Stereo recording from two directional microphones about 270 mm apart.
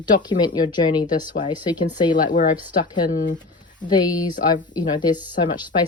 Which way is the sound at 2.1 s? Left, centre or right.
Left.